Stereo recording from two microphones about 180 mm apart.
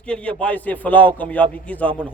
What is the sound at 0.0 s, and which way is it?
A man's voice, 5° left (ahead or behind).